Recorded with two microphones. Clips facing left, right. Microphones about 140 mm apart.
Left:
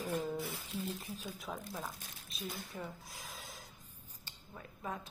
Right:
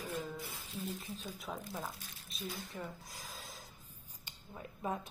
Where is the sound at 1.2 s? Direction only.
Centre (ahead or behind).